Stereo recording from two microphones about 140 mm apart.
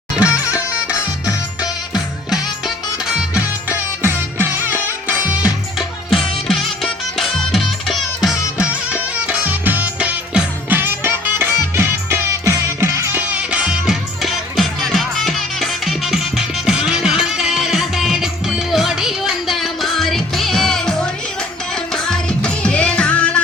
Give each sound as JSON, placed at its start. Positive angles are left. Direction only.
{"t": 0.3, "sound": "music", "side_deg": 25}
{"t": 3.2, "sound": "music", "side_deg": -10}
{"t": 6.5, "sound": "music", "side_deg": 0}